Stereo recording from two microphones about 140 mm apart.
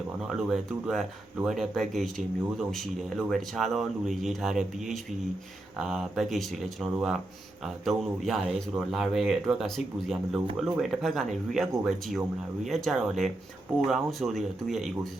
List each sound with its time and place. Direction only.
0.3 s speech: centre (ahead or behind)